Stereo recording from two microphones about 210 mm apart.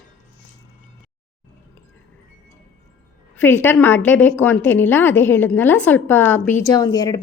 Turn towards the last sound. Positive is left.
turn(degrees=20)  # may be behind; listen again after turning